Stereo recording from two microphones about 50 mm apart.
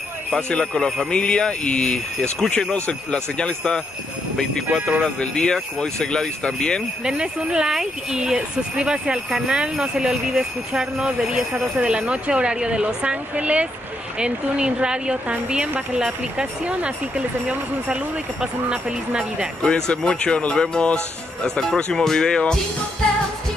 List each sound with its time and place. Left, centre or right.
0.5 s speech: centre
4.6 s speech: right
5.0 s speech: left
7.1 s speech: right
11.1 s speech: right
19.6 s speech: centre